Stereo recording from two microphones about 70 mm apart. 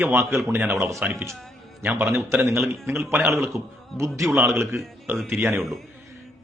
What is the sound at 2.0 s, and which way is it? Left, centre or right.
A man's voice, right.